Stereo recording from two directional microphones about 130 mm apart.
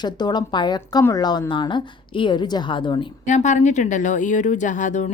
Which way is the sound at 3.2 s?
65° left (ahead or behind).